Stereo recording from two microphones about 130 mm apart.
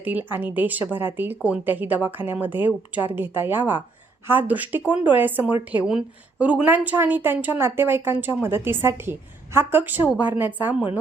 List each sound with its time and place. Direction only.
0.0 s a woman's voice: 15° right (ahead or behind)